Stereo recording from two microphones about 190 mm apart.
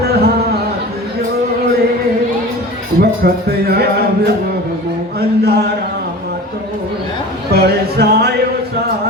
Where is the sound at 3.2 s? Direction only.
55° right (ahead or behind).